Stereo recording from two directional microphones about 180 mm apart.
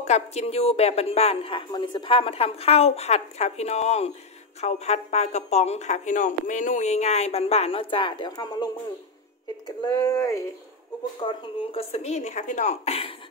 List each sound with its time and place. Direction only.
0.0 s a woman's voice: 40° left (ahead or behind); by 8.6 s 20° left (ahead or behind)
9.7 s speech: 20° left (ahead or behind)
11.1 s a woman's voice: 30° left (ahead or behind)